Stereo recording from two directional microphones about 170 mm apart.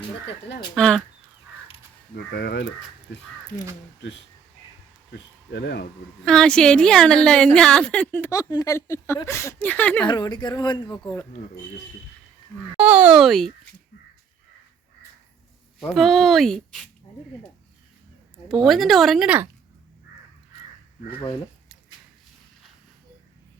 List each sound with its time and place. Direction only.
0.8 s a woman's voice: 5° left (ahead or behind)
2.1 s speech: 70° left (ahead or behind)
5.1 s speech: 85° left
6.2 s a woman's voice: 5° left (ahead or behind)
10.1 s speech: 25° left (ahead or behind)
12.7 s speech: 10° right (ahead or behind)
15.8 s a woman's voice: centre (ahead or behind)
18.4 s a woman's voice: centre (ahead or behind)